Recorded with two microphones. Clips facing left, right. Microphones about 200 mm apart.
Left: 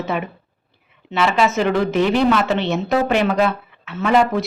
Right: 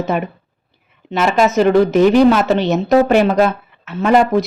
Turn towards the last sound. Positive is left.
turn(degrees=-40)  # may be behind; listen again after turning